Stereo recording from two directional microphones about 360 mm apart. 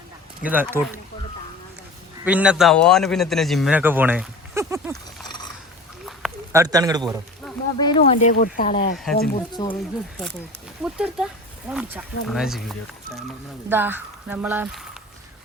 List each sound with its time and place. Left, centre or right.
0.4 s a man's voice: centre
2.2 s a man's voice: centre
6.1 s a sound: centre
7.4 s speech: centre
9.2 s speech: centre
10.8 s a man's voice: centre